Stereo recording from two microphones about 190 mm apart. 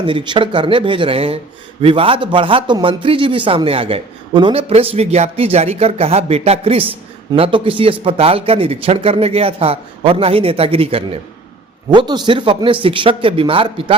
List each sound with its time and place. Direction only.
0.0 s speech: 25° right (ahead or behind)